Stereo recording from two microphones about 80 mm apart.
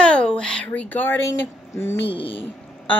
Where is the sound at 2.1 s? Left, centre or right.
Left.